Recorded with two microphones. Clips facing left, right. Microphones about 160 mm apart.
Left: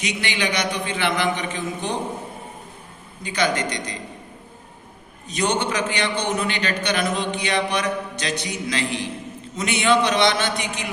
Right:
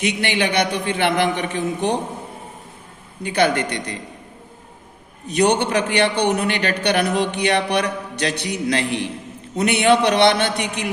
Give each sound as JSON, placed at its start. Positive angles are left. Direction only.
{"t": 0.0, "sound": "a man's voice", "side_deg": -60}
{"t": 3.2, "sound": "a man's voice", "side_deg": -60}
{"t": 5.3, "sound": "a man's voice", "side_deg": -60}